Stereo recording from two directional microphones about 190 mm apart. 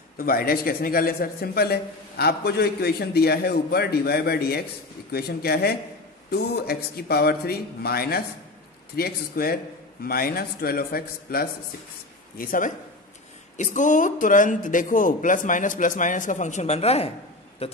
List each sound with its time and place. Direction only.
0.2 s a man's voice: 50° left (ahead or behind); by 17.8 s 35° left (ahead or behind)